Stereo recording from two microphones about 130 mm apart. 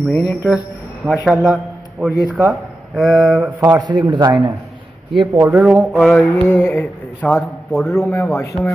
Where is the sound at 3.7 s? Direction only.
35° right (ahead or behind).